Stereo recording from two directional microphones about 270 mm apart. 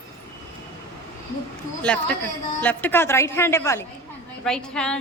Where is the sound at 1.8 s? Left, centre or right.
Centre.